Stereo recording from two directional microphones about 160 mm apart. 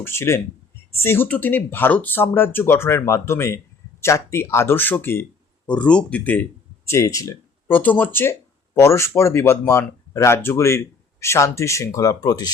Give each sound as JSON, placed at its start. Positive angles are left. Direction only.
{"t": 0.0, "sound": "speech", "side_deg": 15}